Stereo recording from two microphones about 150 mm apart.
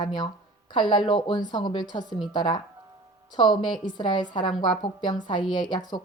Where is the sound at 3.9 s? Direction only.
30° left (ahead or behind).